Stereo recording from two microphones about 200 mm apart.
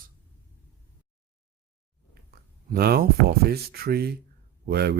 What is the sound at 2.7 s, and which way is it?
Speech, 50° right (ahead or behind).